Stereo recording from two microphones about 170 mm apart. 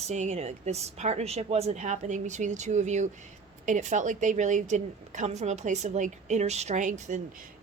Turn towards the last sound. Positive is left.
turn(degrees=-45)  # may be behind; listen again after turning